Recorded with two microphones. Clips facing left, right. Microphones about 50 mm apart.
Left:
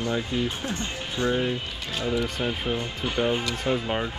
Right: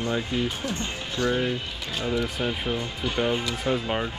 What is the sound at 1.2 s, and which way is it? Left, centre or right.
Speech, left.